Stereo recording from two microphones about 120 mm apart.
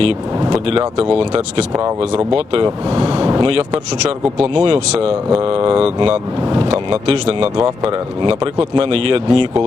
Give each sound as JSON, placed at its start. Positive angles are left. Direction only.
{"t": 3.2, "sound": "vehicle", "side_deg": -25}
{"t": 4.5, "sound": "speech", "side_deg": -55}
{"t": 8.8, "sound": "speech", "side_deg": -50}